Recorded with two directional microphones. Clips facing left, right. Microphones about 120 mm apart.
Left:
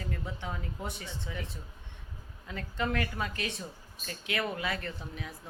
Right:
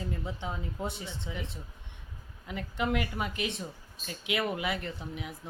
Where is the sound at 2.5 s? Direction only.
15° right (ahead or behind).